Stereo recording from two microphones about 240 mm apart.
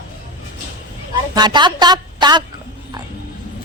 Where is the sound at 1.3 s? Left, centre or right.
Centre.